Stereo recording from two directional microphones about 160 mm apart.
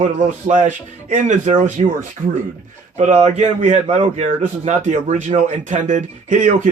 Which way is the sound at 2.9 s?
45° right (ahead or behind).